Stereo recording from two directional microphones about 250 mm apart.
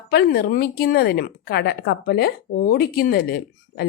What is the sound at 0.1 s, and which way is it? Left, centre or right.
A woman's voice, left.